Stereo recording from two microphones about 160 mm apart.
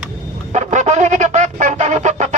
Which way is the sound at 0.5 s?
45° right (ahead or behind).